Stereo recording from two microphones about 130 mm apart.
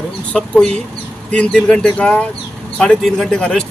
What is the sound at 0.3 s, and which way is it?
Speech, 5° left (ahead or behind).